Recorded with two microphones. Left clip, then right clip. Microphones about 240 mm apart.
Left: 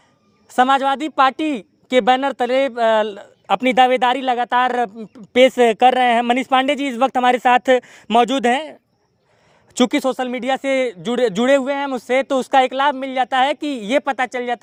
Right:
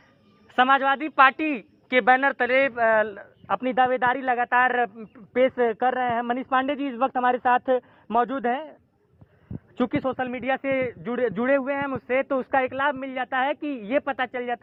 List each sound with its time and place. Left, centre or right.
0.5 s speech: left
9.7 s speech: left